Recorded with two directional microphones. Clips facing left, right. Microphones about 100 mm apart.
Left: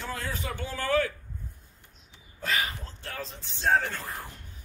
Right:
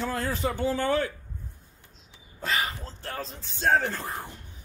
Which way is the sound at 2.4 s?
30° right (ahead or behind).